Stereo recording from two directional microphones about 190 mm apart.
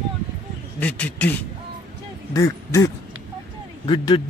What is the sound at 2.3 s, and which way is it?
Speech, 15° left (ahead or behind).